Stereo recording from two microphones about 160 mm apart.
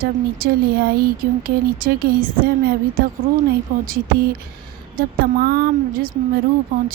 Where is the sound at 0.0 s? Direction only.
70° right (ahead or behind).